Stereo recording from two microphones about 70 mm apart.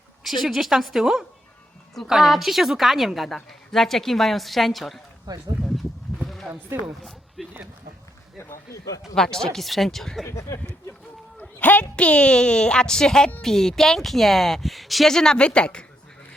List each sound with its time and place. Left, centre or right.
0.4 s a woman's voice: centre
5.5 s a sound: centre
6.7 s speech: right
7.4 s speech: centre
8.4 s speech: left
9.1 s a woman's voice: centre
10.2 s speech: left
11.6 s a woman's voice: left